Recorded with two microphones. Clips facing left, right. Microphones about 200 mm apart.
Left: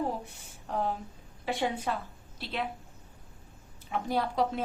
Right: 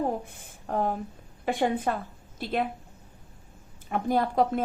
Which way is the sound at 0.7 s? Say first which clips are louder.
Right 4 dB; 50° right (ahead or behind).